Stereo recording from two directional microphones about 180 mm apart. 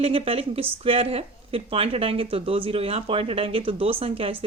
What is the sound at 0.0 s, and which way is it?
Speech, 30° right (ahead or behind).